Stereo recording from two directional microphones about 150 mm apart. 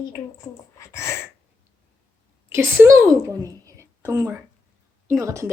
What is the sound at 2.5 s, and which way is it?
A woman's voice, 15° right (ahead or behind).